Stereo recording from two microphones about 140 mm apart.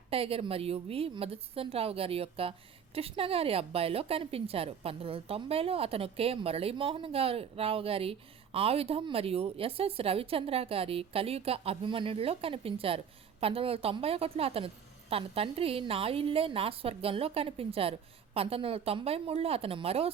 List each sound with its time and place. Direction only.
0.1 s a woman's voice: 45° right (ahead or behind)